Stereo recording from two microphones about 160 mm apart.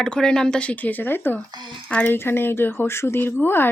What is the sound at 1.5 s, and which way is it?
Speech, 25° right (ahead or behind).